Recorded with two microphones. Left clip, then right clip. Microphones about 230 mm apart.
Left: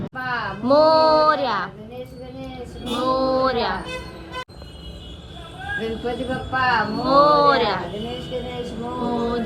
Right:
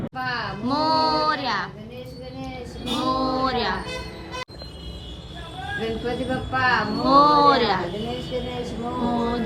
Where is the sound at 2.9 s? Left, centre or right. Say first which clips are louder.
Left 3 dB; centre.